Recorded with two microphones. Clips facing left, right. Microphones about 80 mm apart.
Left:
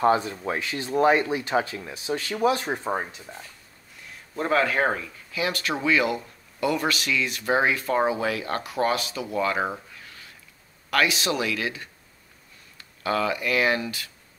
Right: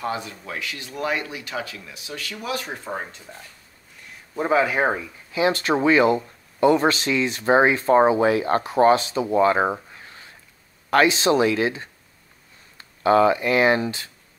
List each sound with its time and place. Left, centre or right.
0.0 s speech: left
3.0 s speech: centre
4.1 s speech: centre
5.3 s speech: right